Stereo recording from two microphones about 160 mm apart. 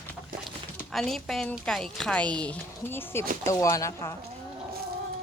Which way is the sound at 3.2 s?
60° right (ahead or behind).